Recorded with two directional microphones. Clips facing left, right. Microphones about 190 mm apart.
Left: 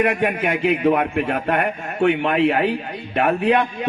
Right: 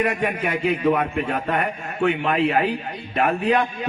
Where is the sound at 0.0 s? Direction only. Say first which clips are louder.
Left 3 dB; 55° left (ahead or behind).